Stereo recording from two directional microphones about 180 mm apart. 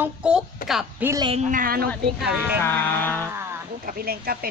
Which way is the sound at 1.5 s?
55° right (ahead or behind).